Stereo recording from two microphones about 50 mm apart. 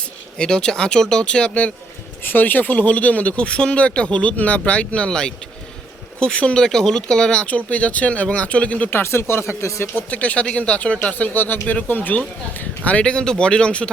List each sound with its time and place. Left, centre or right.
0.3 s speech: centre
2.2 s speech: left; by 7.4 s centre
7.4 s speech: left
8.9 s speech: left
9.9 s speech: left
11.1 s speech: left; by 13.9 s centre